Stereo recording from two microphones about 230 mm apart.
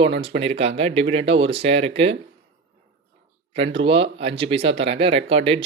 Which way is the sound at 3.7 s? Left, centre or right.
Right.